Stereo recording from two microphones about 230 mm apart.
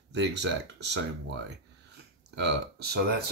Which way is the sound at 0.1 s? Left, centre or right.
Right.